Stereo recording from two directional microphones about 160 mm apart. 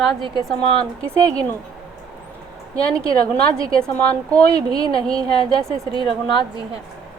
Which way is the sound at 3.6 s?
20° right (ahead or behind).